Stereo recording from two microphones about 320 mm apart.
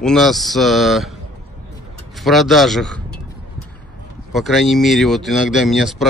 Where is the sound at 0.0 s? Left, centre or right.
Centre.